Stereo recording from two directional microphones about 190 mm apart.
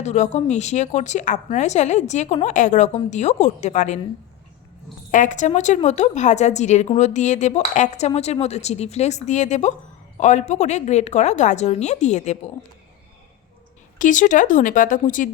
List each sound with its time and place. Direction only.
0.0 s a woman's voice: 35° left (ahead or behind)
5.1 s a woman's voice: 40° left (ahead or behind)
14.0 s speech: 40° left (ahead or behind)